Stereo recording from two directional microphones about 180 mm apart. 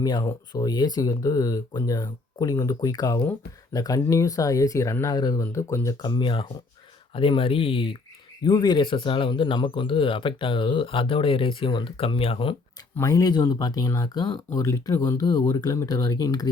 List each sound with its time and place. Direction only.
0.0 s speech: 20° left (ahead or behind)
13.0 s speech: 20° left (ahead or behind)